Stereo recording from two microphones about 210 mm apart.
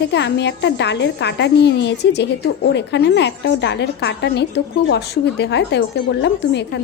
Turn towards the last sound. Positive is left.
turn(degrees=55)  # may be behind; listen again after turning